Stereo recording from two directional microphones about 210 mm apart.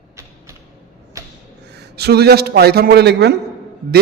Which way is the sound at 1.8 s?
50° right (ahead or behind).